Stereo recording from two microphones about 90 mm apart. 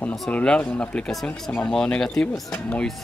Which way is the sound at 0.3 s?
15° left (ahead or behind).